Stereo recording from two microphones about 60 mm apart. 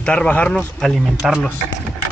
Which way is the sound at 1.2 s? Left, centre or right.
Centre.